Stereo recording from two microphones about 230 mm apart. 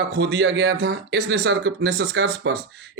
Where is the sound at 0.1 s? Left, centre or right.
Right.